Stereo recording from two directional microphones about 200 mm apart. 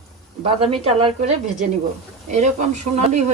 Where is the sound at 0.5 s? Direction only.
30° right (ahead or behind).